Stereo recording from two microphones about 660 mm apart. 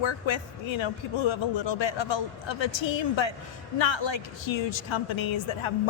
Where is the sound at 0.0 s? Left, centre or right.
Left.